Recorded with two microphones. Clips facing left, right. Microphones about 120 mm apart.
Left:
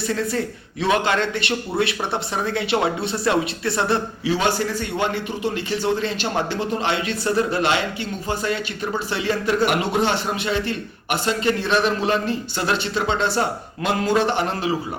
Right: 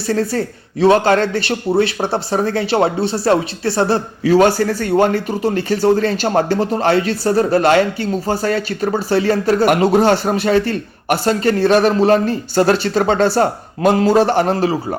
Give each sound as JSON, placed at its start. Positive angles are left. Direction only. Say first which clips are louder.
{"t": 0.1, "sound": "speech", "louder": "right 8 dB", "side_deg": -35}